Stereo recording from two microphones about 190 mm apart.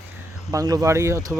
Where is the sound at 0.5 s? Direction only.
20° right (ahead or behind).